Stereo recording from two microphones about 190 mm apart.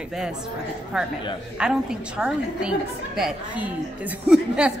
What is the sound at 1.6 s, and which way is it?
A woman's voice, 5° right (ahead or behind).